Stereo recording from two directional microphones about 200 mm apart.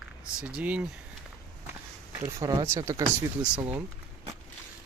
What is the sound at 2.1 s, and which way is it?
Speech, 20° right (ahead or behind).